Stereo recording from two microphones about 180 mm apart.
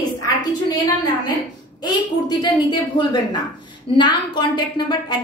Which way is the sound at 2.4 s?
25° left (ahead or behind).